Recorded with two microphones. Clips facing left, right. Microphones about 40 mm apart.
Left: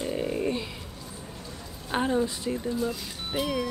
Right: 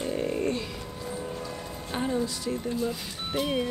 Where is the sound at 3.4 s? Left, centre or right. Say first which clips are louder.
Right 1 dB; centre.